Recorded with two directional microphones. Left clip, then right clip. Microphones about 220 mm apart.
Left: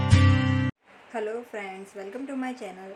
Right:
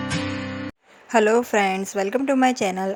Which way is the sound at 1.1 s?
45° right (ahead or behind).